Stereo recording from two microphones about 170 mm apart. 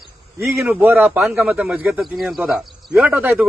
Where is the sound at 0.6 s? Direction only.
10° right (ahead or behind).